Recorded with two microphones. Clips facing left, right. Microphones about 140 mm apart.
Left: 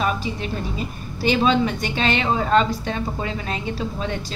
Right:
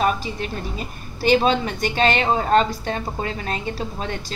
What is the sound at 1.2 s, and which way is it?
A woman's voice, 45° right (ahead or behind).